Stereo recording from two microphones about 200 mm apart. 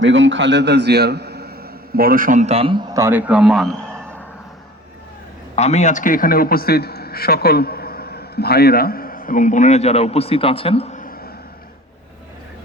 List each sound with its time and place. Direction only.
0.0 s a man's voice: 70° right (ahead or behind); by 4.2 s centre (ahead or behind)
5.5 s a man's voice: 35° left (ahead or behind)